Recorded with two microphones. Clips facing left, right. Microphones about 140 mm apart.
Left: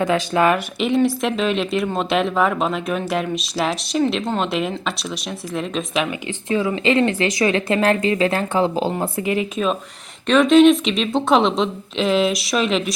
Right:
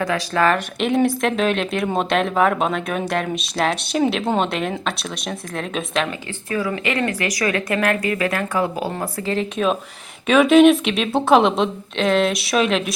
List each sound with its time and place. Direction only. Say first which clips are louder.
0.0 s a woman's voice: left 2 dB; 20° left (ahead or behind)
0.5 s speech: even; centre (ahead or behind)
6.5 s a woman's voice: left 4 dB; 25° left (ahead or behind)
9.6 s speech: right 1 dB; centre (ahead or behind)